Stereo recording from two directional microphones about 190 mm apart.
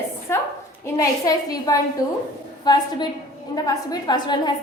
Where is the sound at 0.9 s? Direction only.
20° left (ahead or behind).